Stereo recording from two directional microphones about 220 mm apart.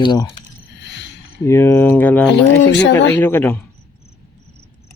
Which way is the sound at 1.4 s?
10° left (ahead or behind).